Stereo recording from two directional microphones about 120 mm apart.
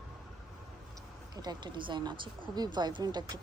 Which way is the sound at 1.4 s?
40° right (ahead or behind).